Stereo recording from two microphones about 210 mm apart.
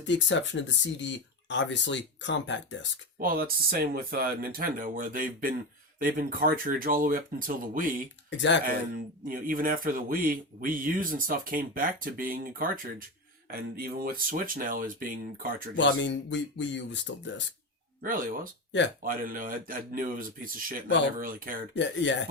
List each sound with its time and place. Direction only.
0.0 s speech: 60° left (ahead or behind)
3.2 s speech: 45° right (ahead or behind)
8.3 s speech: 60° left (ahead or behind)
9.2 s speech: 40° right (ahead or behind)
15.7 s speech: 60° left (ahead or behind)
18.0 s speech: 40° right (ahead or behind)
21.8 s speech: 60° left (ahead or behind)